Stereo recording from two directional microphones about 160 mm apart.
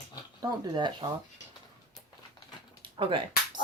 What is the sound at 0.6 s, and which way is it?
Speech, 25° right (ahead or behind).